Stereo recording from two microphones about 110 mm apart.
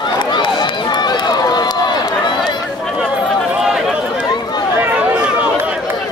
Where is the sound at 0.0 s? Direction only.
45° left (ahead or behind).